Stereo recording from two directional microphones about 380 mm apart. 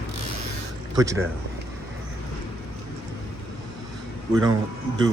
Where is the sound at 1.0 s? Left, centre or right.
Centre.